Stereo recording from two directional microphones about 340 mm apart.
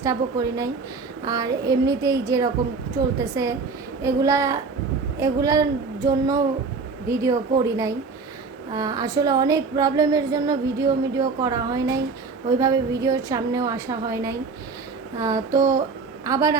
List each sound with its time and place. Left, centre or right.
0.0 s speech: centre